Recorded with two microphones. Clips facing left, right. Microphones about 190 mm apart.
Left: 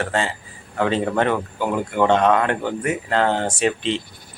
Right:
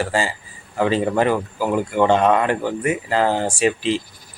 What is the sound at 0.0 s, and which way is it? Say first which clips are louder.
Speech: right 1 dB; 5° right (ahead or behind).